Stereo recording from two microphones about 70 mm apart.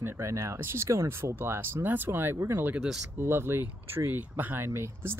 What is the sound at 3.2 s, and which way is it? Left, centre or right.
Speech, right.